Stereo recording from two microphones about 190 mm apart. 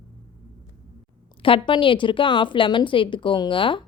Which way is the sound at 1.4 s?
25° left (ahead or behind).